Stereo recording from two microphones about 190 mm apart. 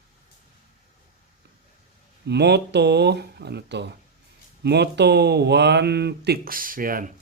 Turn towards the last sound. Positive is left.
turn(degrees=-45)  # may be behind; listen again after turning